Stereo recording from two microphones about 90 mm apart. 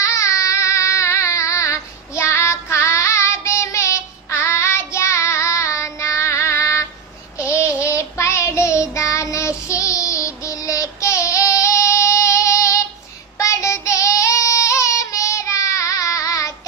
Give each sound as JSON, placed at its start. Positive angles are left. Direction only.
{"t": 0.0, "sound": "child singing", "side_deg": 35}